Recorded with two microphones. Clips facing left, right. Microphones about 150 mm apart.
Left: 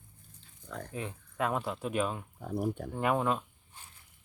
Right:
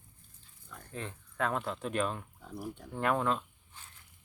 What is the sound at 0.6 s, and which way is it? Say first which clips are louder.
Speech: left 10 dB; 75° left (ahead or behind).